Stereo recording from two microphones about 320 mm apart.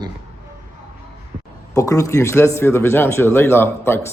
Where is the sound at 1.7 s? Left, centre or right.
Centre.